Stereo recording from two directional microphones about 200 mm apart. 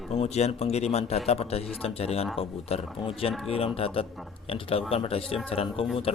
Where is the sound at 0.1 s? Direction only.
35° left (ahead or behind).